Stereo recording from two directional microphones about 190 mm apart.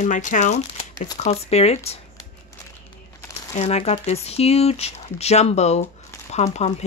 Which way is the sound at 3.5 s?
35° left (ahead or behind).